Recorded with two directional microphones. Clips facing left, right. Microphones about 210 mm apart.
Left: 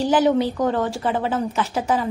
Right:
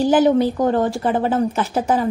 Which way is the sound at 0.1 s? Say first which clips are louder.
Right 2 dB; 45° right (ahead or behind).